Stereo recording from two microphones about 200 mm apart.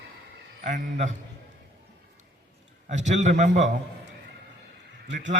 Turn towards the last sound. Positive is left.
turn(degrees=-40)  # may be behind; listen again after turning